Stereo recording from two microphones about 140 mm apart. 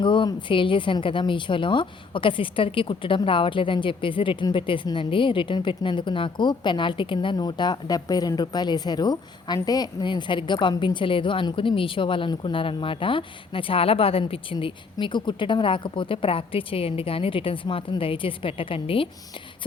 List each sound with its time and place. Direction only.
0.0 s a woman's voice: 35° left (ahead or behind)